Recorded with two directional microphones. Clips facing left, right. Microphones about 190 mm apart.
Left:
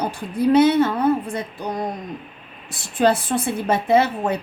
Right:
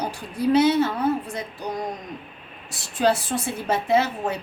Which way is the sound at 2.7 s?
55° left (ahead or behind).